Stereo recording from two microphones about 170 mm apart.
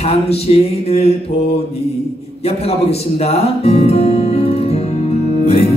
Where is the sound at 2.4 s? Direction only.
35° left (ahead or behind).